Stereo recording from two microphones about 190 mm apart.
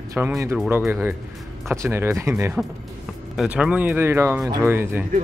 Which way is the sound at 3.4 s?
5° right (ahead or behind).